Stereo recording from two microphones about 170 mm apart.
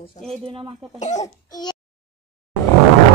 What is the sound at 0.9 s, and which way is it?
Speech, 45° left (ahead or behind).